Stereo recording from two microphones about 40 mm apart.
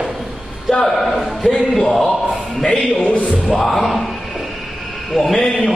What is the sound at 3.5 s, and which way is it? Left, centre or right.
Speech, centre.